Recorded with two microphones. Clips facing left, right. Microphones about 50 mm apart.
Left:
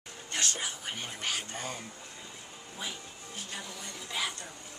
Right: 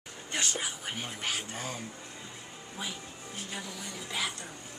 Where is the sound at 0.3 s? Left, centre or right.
Centre.